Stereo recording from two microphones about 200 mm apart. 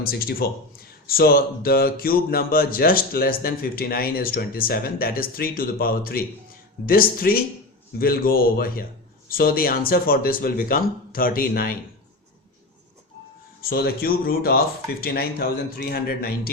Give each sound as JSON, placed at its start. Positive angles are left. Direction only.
{"t": 0.0, "sound": "speech", "side_deg": 50}
{"t": 13.6, "sound": "speech", "side_deg": 50}